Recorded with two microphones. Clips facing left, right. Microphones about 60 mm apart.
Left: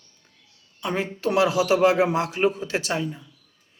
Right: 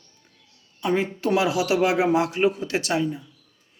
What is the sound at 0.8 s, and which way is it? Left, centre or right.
Speech, centre.